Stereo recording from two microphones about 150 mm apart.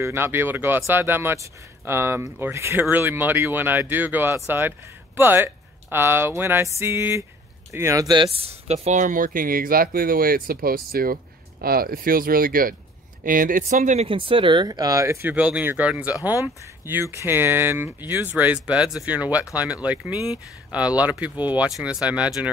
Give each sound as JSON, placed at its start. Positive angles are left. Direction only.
{"t": 0.0, "sound": "speech", "side_deg": -15}
{"t": 14.0, "sound": "speech", "side_deg": -35}
{"t": 15.2, "sound": "speech", "side_deg": -10}